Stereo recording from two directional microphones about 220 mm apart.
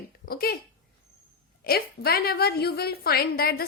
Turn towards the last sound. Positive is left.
turn(degrees=45)  # may be behind; listen again after turning